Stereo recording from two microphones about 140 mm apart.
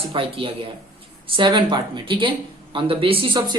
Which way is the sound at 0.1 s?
40° right (ahead or behind).